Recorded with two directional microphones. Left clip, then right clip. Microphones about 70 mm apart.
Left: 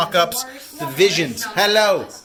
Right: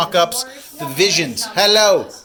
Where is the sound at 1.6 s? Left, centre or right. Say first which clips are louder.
Right 4 dB; centre.